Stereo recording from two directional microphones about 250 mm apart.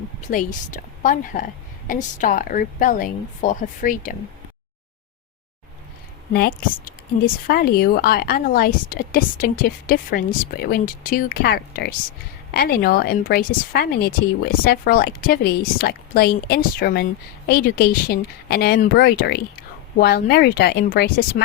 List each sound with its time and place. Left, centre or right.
0.2 s a woman's voice: left
6.3 s a woman's voice: left